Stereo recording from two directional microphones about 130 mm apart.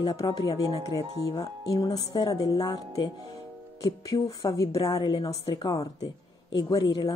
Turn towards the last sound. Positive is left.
turn(degrees=35)  # may be behind; listen again after turning